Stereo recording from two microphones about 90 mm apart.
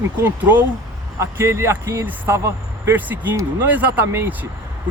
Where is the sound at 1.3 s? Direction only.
30° right (ahead or behind).